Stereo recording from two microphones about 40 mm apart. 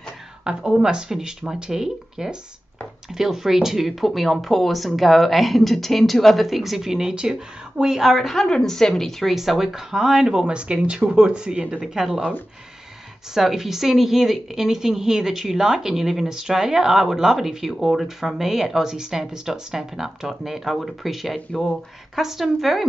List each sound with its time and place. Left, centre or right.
0.4 s a woman's voice: right
8.2 s a woman's voice: centre
9.2 s speech: centre; by 11.8 s right
11.8 s a woman's voice: centre
13.3 s a woman's voice: centre